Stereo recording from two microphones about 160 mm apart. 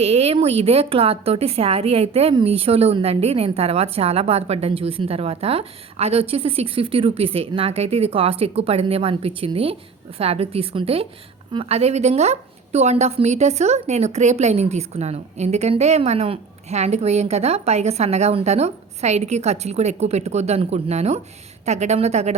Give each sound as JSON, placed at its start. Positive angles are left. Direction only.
{"t": 0.0, "sound": "a woman's voice", "side_deg": -40}